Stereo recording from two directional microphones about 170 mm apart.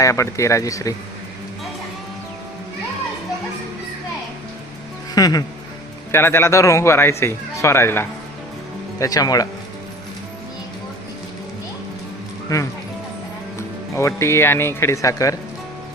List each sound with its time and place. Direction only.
0.0 s speech: 20° left (ahead or behind)
5.1 s speech: 20° left (ahead or behind)
13.6 s speech: 15° left (ahead or behind)